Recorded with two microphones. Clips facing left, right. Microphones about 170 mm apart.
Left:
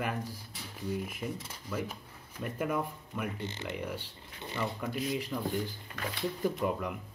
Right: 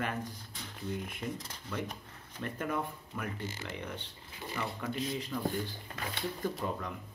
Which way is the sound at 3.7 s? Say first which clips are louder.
Left 4 dB; 5° left (ahead or behind).